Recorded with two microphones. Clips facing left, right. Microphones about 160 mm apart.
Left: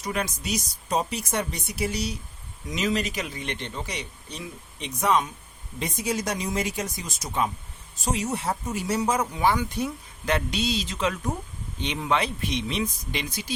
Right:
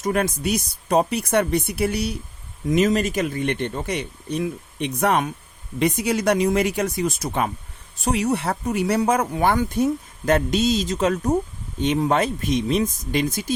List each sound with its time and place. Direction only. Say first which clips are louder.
0.0 s speech: right 8 dB; 50° right (ahead or behind)